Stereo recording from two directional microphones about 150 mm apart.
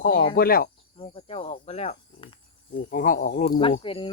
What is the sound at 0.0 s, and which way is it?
Speech, 75° left (ahead or behind).